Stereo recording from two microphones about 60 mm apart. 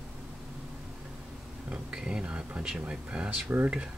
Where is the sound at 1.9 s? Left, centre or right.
Centre.